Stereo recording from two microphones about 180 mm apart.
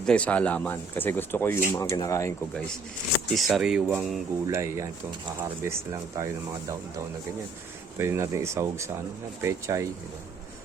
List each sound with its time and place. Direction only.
0.0 s speech: 5° left (ahead or behind)
3.3 s speech: centre (ahead or behind); by 6.2 s 15° right (ahead or behind)
7.9 s speech: 15° right (ahead or behind)